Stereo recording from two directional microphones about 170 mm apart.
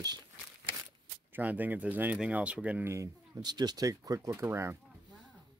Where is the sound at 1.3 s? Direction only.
10° right (ahead or behind).